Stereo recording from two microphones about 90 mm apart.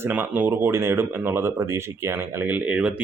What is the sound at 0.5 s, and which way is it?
Speech, 30° right (ahead or behind).